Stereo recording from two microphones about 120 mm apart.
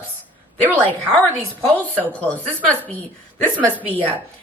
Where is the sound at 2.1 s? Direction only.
15° left (ahead or behind).